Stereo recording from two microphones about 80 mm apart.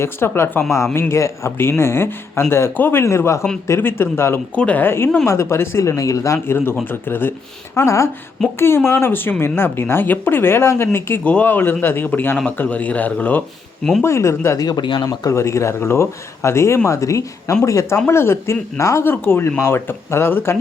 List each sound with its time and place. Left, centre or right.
0.0 s a woman's voice: left
4.5 s speech: centre
4.9 s speech: left
6.5 s a woman's voice: left
7.8 s a woman's voice: left
11.2 s a woman's voice: centre
14.0 s speech: left
14.8 s speech: left
15.3 s speech: left
19.0 s a woman's voice: left